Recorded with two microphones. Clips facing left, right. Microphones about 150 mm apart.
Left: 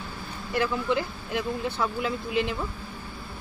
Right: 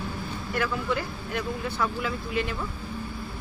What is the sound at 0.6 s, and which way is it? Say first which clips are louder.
Speech: left 3 dB; 20° left (ahead or behind).